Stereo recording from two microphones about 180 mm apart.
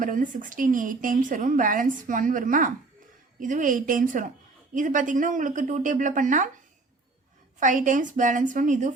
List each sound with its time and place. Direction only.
0.0 s a woman's voice: 45° right (ahead or behind)
7.6 s a woman's voice: 45° right (ahead or behind)